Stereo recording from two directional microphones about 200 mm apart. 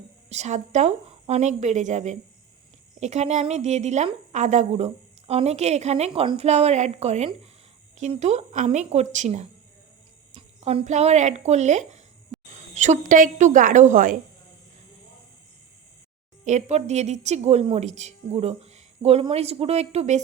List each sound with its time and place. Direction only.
0.3 s speech: 35° right (ahead or behind)
16.4 s speech: 35° right (ahead or behind)